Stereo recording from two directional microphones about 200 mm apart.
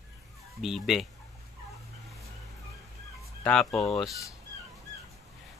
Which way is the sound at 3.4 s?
5° left (ahead or behind).